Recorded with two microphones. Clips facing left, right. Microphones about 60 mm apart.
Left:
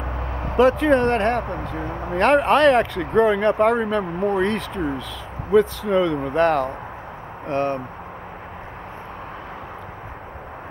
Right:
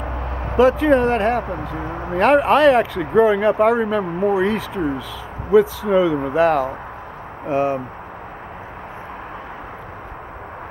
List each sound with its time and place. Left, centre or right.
0.6 s speech: centre